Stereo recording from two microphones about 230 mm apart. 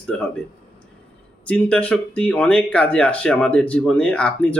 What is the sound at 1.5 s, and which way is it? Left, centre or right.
Speech, centre.